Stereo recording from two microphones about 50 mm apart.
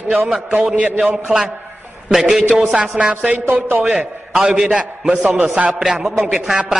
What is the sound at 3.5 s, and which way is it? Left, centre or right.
Speech, right.